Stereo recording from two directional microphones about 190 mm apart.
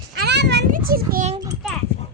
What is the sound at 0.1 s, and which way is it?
Children playing, 65° right (ahead or behind).